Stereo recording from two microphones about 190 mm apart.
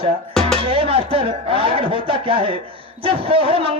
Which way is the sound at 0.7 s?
30° right (ahead or behind).